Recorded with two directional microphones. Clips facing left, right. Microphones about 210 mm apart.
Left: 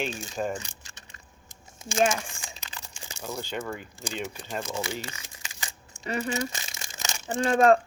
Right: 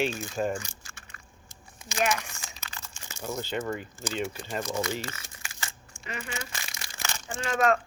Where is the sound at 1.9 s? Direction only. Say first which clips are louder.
Left 4 dB; 30° left (ahead or behind).